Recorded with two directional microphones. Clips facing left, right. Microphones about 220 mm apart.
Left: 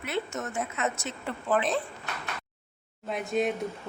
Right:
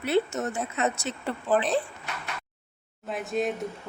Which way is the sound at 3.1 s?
Centre (ahead or behind).